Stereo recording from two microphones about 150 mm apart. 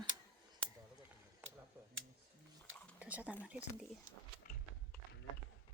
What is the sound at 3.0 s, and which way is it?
Speech, 10° right (ahead or behind).